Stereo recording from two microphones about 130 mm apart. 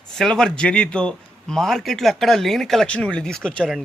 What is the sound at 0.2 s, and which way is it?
A man's voice, 5° left (ahead or behind).